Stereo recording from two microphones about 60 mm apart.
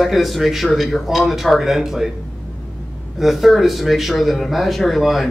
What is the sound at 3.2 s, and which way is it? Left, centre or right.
Speech, centre.